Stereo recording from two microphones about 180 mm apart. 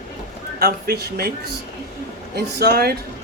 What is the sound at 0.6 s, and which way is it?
Speech, 60° right (ahead or behind).